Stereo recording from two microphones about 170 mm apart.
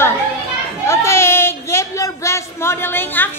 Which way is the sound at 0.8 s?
15° left (ahead or behind).